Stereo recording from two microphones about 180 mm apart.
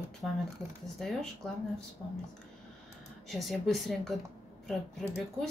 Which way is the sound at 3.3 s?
Centre (ahead or behind).